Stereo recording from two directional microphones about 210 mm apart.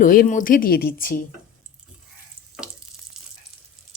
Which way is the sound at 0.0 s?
40° left (ahead or behind).